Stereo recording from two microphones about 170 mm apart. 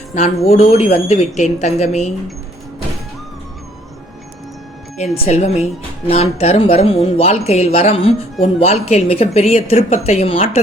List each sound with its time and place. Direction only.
0.4 s speech: 40° left (ahead or behind)
5.1 s speech: 40° left (ahead or behind)